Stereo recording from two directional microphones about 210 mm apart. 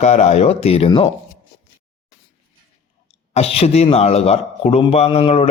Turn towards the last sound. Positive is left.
turn(degrees=30)  # may be behind; listen again after turning